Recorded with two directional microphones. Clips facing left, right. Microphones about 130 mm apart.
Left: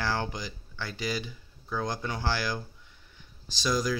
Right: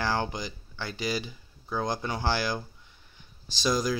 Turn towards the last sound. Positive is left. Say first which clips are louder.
# right 1 dB
turn(degrees=-25)  # may be behind; listen again after turning